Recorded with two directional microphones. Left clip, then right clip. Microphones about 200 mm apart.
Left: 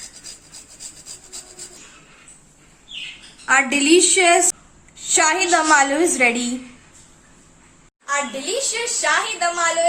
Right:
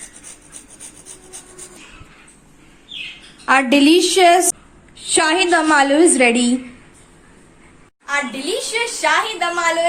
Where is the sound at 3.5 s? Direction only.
25° right (ahead or behind); by 6.5 s 10° right (ahead or behind).